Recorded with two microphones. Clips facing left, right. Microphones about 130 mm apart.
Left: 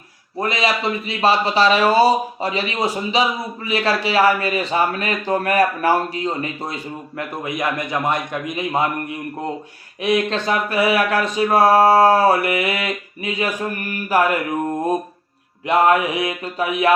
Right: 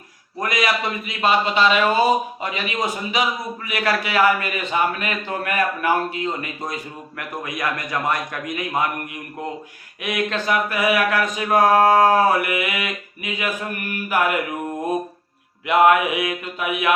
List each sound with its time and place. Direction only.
0.3 s a man's voice: 25° left (ahead or behind)
10.0 s speech: 30° left (ahead or behind)
15.6 s speech: 35° left (ahead or behind)